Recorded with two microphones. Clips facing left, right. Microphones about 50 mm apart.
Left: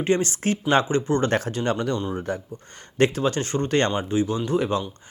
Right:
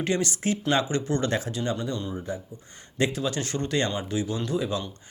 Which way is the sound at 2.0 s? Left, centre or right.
Left.